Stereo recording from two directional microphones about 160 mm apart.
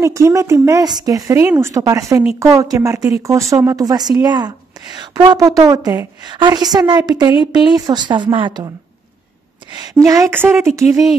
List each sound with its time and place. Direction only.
0.0 s a woman's voice: 20° right (ahead or behind)
9.9 s a woman's voice: 20° right (ahead or behind)